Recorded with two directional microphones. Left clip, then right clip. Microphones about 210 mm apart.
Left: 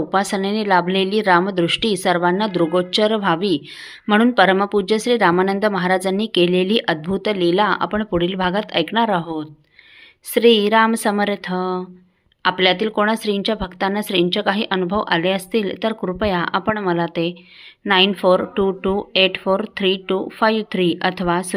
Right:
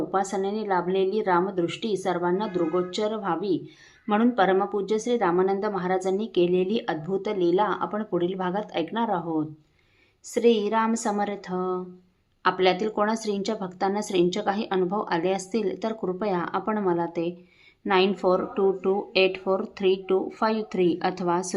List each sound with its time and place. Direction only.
0.1 s speech: 20° left (ahead or behind)